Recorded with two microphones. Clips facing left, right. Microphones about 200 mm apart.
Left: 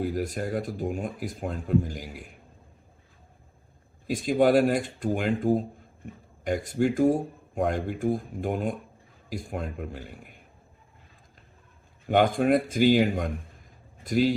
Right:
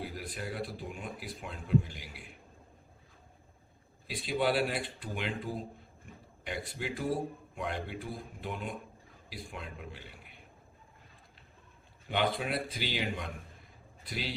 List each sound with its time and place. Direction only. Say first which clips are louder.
0.0 s speech: left 11 dB; 45° left (ahead or behind)
4.0 s speech: left 9 dB; 45° left (ahead or behind)
12.0 s a man's voice: left 10 dB; 45° left (ahead or behind)